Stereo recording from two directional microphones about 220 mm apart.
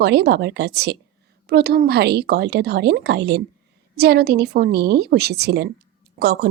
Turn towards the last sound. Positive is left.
turn(degrees=-50)  # may be behind; listen again after turning